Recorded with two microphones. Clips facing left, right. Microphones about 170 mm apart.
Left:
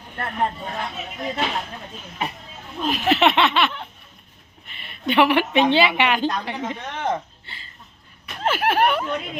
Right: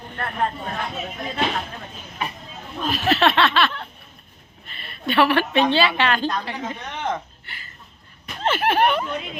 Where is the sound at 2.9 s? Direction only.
20° left (ahead or behind).